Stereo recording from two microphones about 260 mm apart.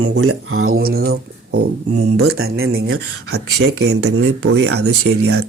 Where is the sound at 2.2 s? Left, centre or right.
Right.